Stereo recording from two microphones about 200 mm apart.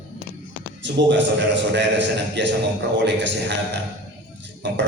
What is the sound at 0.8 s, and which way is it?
A man's voice, 65° right (ahead or behind).